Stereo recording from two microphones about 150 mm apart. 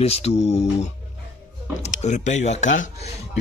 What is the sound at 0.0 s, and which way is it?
Speech, 45° left (ahead or behind).